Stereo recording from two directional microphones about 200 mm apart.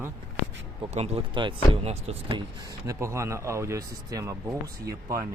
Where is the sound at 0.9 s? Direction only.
30° right (ahead or behind).